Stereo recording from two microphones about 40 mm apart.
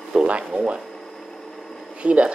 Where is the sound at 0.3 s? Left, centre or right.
Right.